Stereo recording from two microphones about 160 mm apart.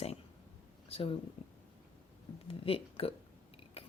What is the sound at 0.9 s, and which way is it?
Speech, 35° left (ahead or behind).